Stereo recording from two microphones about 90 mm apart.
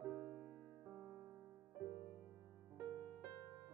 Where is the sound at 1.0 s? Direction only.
15° right (ahead or behind).